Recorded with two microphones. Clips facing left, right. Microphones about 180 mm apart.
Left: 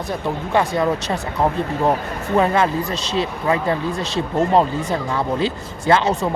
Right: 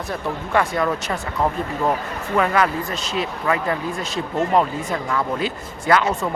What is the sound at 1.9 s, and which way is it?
Speech, 30° left (ahead or behind).